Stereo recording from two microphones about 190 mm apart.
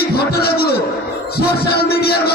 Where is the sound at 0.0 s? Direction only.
55° left (ahead or behind).